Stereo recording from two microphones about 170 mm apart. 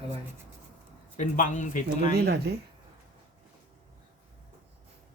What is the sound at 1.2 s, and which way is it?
Speech, 45° left (ahead or behind).